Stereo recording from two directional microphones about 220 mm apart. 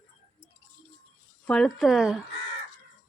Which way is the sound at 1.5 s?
Centre (ahead or behind).